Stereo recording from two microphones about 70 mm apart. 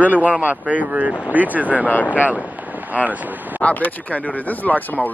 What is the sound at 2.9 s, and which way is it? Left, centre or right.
Speech, right.